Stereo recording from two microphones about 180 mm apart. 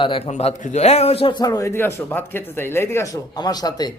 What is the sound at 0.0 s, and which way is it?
A man's voice, 30° left (ahead or behind).